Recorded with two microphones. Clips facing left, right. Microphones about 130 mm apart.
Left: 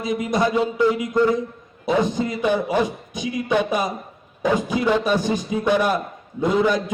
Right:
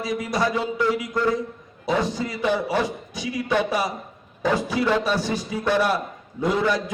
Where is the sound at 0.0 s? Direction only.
20° left (ahead or behind).